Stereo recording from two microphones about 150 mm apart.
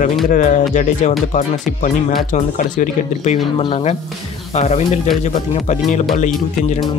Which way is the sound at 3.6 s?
40° left (ahead or behind).